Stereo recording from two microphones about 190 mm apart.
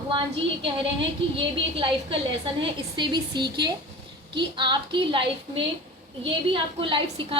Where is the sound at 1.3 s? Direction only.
25° right (ahead or behind).